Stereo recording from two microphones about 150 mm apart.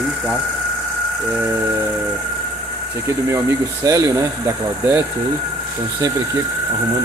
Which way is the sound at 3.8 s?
20° right (ahead or behind).